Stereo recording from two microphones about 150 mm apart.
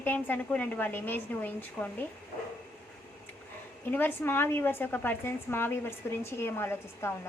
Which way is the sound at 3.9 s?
15° left (ahead or behind).